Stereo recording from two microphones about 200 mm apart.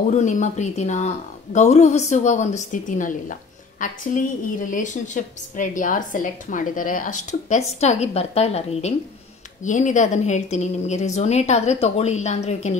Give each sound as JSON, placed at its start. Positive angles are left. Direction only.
{"t": 0.1, "sound": "a woman's voice", "side_deg": 35}